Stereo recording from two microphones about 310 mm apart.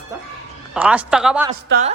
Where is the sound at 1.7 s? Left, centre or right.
Right.